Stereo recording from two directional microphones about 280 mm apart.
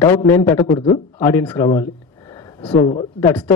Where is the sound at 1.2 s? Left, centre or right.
Centre.